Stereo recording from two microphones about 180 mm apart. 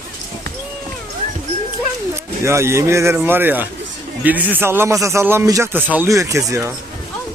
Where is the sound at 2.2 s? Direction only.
15° right (ahead or behind).